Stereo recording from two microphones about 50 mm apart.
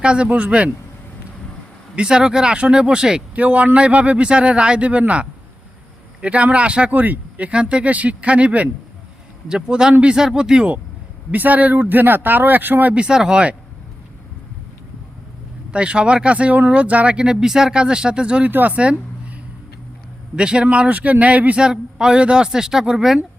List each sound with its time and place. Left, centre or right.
0.0 s speech: right
2.0 s speech: centre
3.3 s speech: right
11.3 s speech: right
12.9 s speech: centre
15.7 s speech: right
18.5 s speech: right
20.3 s speech: centre
21.6 s speech: centre